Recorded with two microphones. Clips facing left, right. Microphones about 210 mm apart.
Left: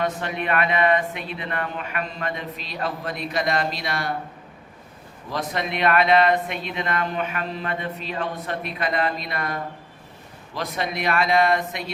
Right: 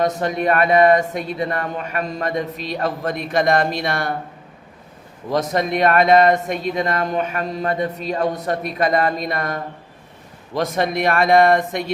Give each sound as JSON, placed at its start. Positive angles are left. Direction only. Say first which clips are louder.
{"t": 0.0, "sound": "speech", "louder": "right 7 dB", "side_deg": -40}
{"t": 5.3, "sound": "speech", "louder": "right 7 dB", "side_deg": -45}
{"t": 10.6, "sound": "speech", "louder": "right 7 dB", "side_deg": -45}